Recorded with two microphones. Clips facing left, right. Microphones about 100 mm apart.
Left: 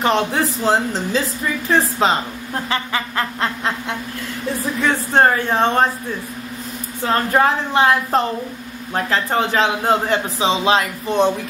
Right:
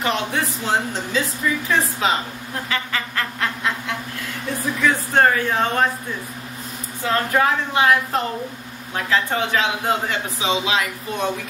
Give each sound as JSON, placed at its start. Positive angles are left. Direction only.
{"t": 0.0, "sound": "a man's voice", "side_deg": 35}
{"t": 2.7, "sound": "duck", "side_deg": 25}
{"t": 4.8, "sound": "a man's voice", "side_deg": 30}
{"t": 7.1, "sound": "a man's voice", "side_deg": 35}